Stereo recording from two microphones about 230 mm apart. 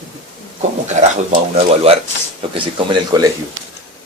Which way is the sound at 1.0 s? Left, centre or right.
Right.